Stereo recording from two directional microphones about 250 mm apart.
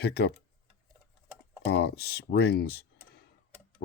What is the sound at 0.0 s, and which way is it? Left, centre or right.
Speech, left.